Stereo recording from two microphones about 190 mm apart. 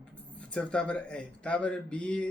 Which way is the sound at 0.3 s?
5° left (ahead or behind).